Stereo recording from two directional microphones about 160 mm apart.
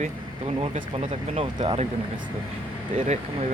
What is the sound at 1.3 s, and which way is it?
Speech, 35° right (ahead or behind).